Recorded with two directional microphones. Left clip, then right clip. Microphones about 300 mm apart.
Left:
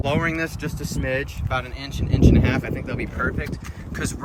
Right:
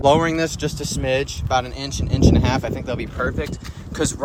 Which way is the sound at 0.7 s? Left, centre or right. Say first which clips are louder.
Right 5 dB; right.